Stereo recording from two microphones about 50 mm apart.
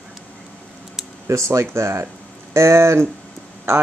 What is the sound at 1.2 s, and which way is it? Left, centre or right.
Speech, right.